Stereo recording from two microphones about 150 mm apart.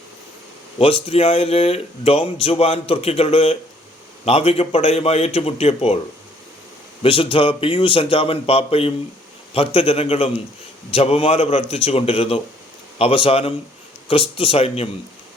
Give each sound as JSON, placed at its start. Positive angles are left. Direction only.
{"t": 0.8, "sound": "a man's voice", "side_deg": 40}
{"t": 7.0, "sound": "speech", "side_deg": 35}